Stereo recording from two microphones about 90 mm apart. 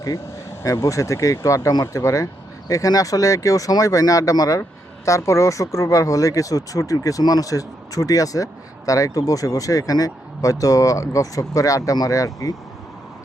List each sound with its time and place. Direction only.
0.6 s speech: 35° left (ahead or behind)